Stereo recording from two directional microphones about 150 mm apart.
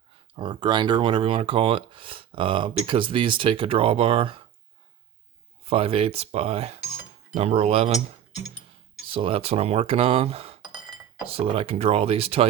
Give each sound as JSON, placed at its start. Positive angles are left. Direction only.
{"t": 0.3, "sound": "speech", "side_deg": -35}
{"t": 5.6, "sound": "speech", "side_deg": -40}
{"t": 9.0, "sound": "speech", "side_deg": -35}